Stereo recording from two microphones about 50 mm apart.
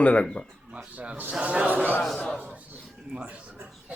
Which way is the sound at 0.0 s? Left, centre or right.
Left.